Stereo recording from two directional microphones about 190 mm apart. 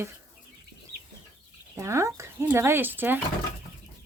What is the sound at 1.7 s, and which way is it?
Speech, 15° right (ahead or behind).